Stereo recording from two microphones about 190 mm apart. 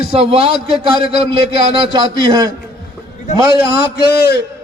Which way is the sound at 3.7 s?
55° left (ahead or behind).